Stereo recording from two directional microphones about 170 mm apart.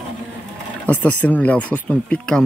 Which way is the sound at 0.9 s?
10° left (ahead or behind).